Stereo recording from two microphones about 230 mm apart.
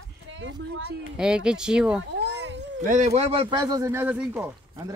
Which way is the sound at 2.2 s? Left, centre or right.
Right.